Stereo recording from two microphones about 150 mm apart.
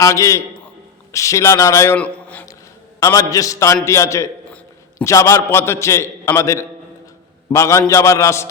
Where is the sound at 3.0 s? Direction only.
25° left (ahead or behind).